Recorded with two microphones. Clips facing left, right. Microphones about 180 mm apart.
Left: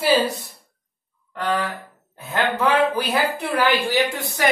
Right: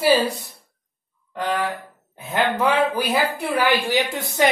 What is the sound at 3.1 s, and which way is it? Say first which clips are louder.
Speech: right 1 dB; 10° right (ahead or behind).